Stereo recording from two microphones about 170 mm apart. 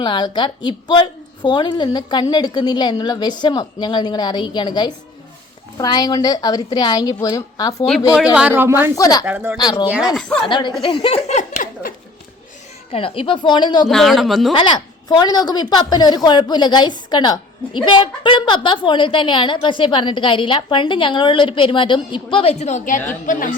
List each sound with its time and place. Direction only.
0.0 s a woman's voice: 25° left (ahead or behind)
8.1 s speech: 5° right (ahead or behind)
9.0 s a woman's voice: 20° left (ahead or behind)
9.2 s speech: 10° right (ahead or behind)
9.6 s a woman's voice: 25° left (ahead or behind)
9.8 s speech: 10° right (ahead or behind)
10.2 s speech: 5° left (ahead or behind)
10.5 s speech: 25° left (ahead or behind); by 11.9 s 50° left (ahead or behind)
12.9 s a woman's voice: 30° left (ahead or behind)
13.8 s speech: centre (ahead or behind)
14.5 s a woman's voice: 30° left (ahead or behind); by 23.6 s 50° left (ahead or behind)